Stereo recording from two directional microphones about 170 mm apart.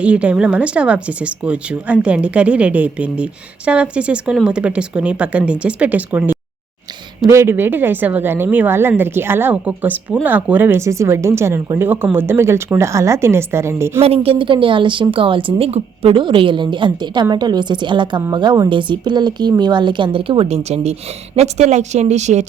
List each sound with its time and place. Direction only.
0.0 s speech: 5° right (ahead or behind)
14.0 s speech: 35° right (ahead or behind)